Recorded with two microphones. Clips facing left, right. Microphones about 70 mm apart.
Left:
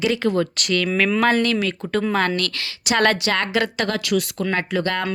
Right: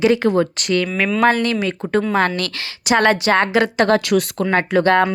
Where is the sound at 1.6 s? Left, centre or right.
Right.